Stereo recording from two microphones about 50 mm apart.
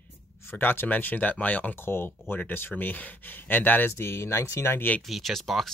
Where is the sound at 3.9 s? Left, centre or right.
Left.